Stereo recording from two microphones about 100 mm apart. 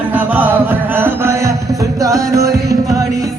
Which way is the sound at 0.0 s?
15° right (ahead or behind).